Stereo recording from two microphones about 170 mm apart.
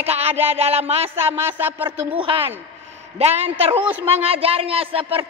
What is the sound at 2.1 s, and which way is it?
A man's voice, 30° right (ahead or behind).